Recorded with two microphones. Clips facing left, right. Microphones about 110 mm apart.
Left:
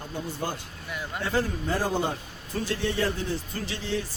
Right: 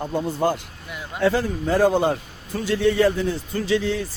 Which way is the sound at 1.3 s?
90° right.